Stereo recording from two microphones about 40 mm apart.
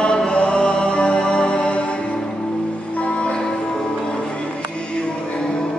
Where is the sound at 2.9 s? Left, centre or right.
Left.